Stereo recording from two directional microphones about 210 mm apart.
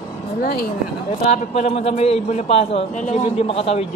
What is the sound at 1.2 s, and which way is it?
A man's voice, 30° left (ahead or behind).